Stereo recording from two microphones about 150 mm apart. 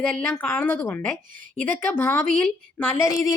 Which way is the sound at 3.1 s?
25° left (ahead or behind).